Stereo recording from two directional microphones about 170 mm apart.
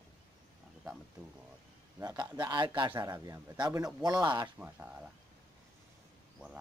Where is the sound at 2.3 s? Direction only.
25° right (ahead or behind).